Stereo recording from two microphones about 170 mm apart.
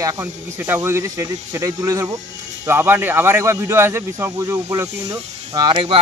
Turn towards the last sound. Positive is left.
turn(degrees=-30)  # may be behind; listen again after turning